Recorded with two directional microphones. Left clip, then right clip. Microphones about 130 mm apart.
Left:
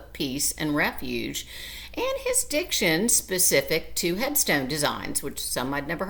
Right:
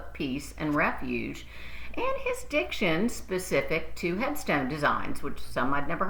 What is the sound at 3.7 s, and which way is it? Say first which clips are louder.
A woman's voice: left 4 dB; 40° left (ahead or behind).